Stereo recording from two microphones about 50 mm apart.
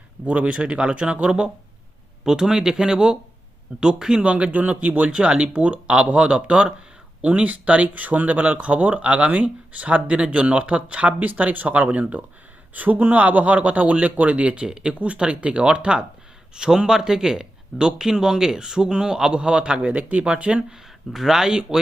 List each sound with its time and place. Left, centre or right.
0.3 s speech: right
4.2 s speech: right
21.1 s speech: centre